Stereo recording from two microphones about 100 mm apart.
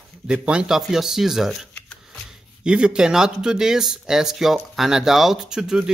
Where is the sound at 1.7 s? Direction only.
10° left (ahead or behind).